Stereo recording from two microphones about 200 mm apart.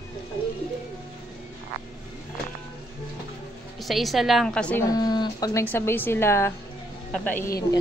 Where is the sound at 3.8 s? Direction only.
Centre (ahead or behind).